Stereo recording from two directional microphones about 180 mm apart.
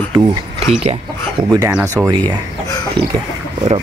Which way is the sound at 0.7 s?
35° right (ahead or behind).